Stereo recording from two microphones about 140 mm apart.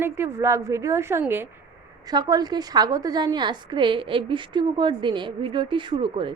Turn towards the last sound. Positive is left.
turn(degrees=-35)  # may be behind; listen again after turning